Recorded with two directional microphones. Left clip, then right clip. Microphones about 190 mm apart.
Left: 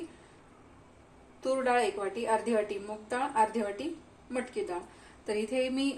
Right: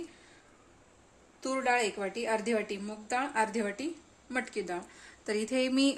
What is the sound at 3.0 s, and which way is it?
Speech, 55° right (ahead or behind).